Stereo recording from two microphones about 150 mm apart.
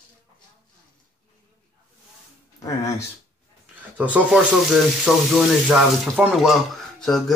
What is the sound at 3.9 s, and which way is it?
Speech, 10° right (ahead or behind).